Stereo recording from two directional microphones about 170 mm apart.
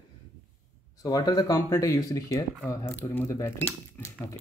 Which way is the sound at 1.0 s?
20° left (ahead or behind).